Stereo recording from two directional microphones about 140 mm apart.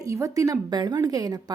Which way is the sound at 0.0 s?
25° right (ahead or behind).